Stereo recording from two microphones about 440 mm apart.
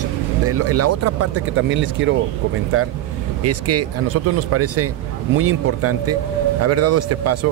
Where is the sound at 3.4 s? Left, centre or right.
Right.